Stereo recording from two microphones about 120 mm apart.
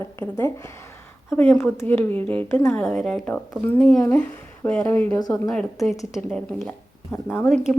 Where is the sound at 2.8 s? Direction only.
5° left (ahead or behind).